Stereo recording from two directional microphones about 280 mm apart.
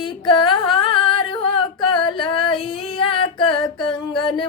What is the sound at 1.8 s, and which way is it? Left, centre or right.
Female singing, centre.